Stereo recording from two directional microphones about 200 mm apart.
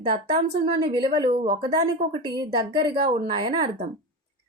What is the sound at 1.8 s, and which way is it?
Speech, 35° right (ahead or behind).